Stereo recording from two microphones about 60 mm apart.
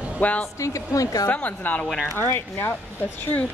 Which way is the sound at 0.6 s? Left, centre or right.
Left.